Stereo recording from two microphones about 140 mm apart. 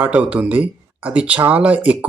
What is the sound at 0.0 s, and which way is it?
Speech, 10° right (ahead or behind).